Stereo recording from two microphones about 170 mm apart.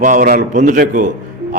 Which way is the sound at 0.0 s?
50° right (ahead or behind).